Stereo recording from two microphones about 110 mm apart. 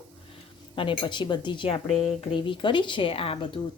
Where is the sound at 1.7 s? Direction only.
60° left (ahead or behind).